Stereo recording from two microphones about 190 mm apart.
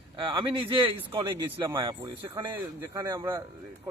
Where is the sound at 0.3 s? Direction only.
25° right (ahead or behind).